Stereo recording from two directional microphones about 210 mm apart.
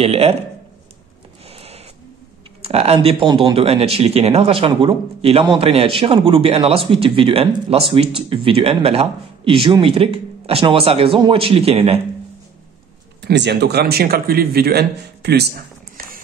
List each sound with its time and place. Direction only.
0.0 s speech: 30° right (ahead or behind)
1.5 s owl: 30° right (ahead or behind)
2.6 s speech: 30° right (ahead or behind)
13.2 s speech: 55° right (ahead or behind)
16.0 s a sound: 45° right (ahead or behind)